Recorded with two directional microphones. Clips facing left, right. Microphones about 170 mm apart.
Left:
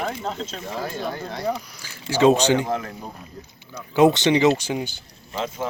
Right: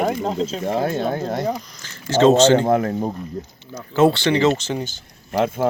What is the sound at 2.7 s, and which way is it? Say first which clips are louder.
Speech: right 9 dB; 55° right (ahead or behind).